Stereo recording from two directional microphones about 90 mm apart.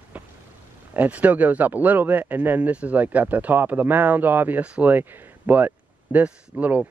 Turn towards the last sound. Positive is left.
turn(degrees=-15)  # may be behind; listen again after turning